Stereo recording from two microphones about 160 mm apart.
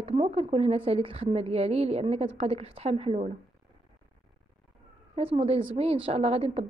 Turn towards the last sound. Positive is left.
turn(degrees=-40)  # may be behind; listen again after turning